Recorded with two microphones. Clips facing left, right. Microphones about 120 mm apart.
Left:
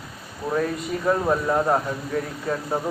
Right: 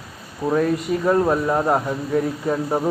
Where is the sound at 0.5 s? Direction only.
5° right (ahead or behind).